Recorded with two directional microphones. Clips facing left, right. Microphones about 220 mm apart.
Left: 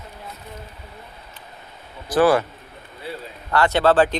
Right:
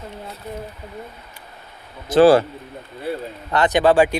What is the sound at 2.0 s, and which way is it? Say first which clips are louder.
Speech: right 5 dB; 25° right (ahead or behind).